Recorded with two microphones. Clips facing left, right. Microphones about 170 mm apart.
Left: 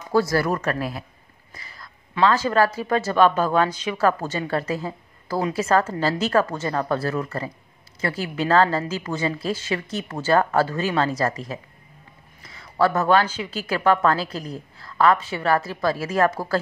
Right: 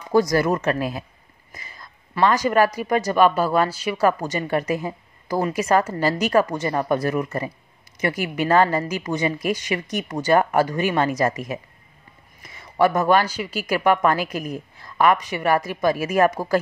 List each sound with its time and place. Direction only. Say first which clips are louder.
0.1 s speech: right 2 dB; 15° right (ahead or behind)
1.5 s a sound: right 1 dB; 20° right (ahead or behind)
2.1 s speech: right 1 dB; 15° right (ahead or behind)